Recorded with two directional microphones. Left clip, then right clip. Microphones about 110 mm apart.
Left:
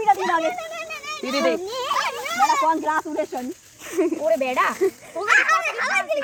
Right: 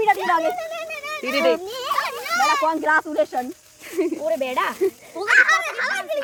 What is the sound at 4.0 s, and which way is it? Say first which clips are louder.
Speech: left 1 dB; 5° right (ahead or behind).